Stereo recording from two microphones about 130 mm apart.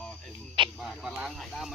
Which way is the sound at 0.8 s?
Centre (ahead or behind).